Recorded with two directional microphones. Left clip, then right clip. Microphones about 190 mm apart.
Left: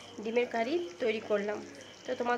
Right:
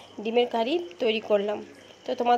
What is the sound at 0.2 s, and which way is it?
A woman's voice, 25° right (ahead or behind).